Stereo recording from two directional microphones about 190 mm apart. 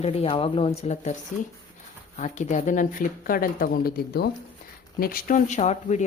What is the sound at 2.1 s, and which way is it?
Speech, 40° left (ahead or behind).